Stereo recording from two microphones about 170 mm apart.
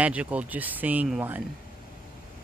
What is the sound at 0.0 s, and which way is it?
Speech, 10° right (ahead or behind).